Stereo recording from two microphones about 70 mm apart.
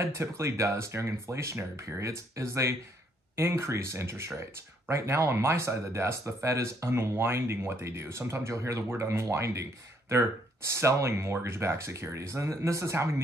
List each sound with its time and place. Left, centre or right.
0.0 s speech: right